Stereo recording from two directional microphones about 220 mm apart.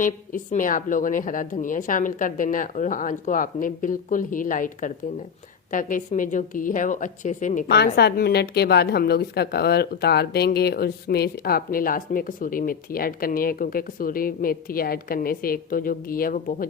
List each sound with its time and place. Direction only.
0.0 s a woman's voice: 40° left (ahead or behind)
7.9 s a woman's voice: 45° left (ahead or behind)